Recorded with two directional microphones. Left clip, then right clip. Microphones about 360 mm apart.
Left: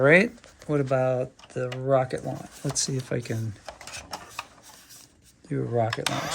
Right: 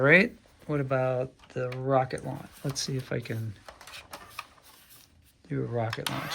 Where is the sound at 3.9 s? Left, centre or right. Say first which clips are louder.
Left 4 dB; left.